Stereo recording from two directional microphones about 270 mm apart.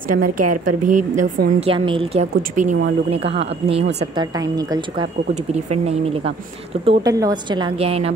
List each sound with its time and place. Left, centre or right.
0.2 s a woman's voice: right
6.9 s speech: centre